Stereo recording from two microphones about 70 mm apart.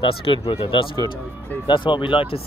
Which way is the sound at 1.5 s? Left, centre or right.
Left.